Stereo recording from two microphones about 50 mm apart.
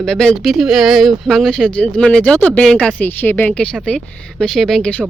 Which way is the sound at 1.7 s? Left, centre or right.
Left.